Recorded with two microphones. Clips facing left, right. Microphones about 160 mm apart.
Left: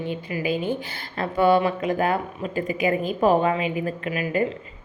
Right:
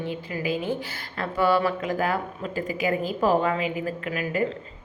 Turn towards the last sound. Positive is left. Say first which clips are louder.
# left 2 dB
turn(degrees=20)  # may be behind; listen again after turning